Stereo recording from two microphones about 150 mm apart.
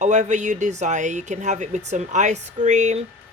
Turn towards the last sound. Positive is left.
turn(degrees=-50)  # may be behind; listen again after turning